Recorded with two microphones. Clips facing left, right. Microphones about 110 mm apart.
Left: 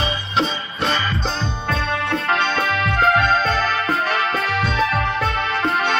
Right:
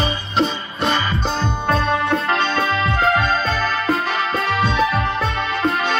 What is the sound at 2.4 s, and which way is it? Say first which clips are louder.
Music: right 1 dB; 5° right (ahead or behind).